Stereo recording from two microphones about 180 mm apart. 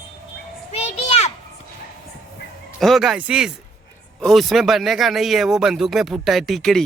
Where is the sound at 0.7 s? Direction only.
35° left (ahead or behind).